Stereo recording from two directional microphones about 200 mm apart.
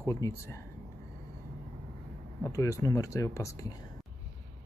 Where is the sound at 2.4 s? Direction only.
15° left (ahead or behind).